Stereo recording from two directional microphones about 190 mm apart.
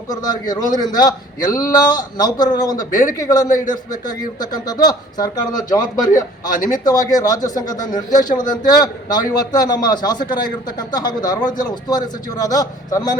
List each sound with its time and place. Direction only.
0.1 s speech: 20° left (ahead or behind)
6.5 s speech: 45° left (ahead or behind)
6.8 s speech: 20° left (ahead or behind)